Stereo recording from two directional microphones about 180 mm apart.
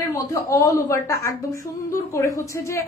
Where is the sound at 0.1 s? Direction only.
15° left (ahead or behind).